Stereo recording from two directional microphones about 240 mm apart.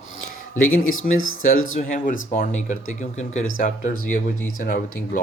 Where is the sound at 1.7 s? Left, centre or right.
Left.